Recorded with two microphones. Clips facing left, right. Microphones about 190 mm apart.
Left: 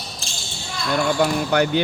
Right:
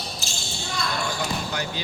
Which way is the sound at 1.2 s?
65° left (ahead or behind).